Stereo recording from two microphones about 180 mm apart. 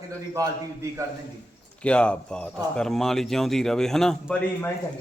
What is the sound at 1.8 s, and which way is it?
Speech, 5° left (ahead or behind).